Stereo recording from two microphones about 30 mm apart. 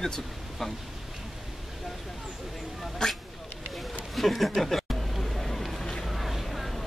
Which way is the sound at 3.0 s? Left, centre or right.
Left.